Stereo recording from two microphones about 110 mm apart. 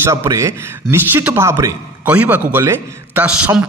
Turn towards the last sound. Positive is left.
turn(degrees=-15)  # may be behind; listen again after turning